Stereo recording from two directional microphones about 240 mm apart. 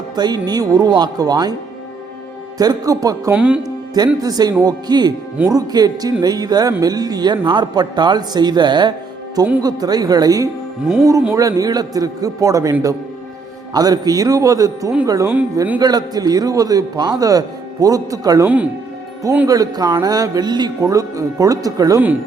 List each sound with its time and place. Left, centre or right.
0.2 s a man's voice: centre
2.6 s a man's voice: centre
3.9 s a man's voice: centre